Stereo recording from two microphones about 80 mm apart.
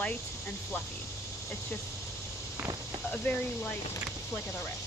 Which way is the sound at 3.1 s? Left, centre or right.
Centre.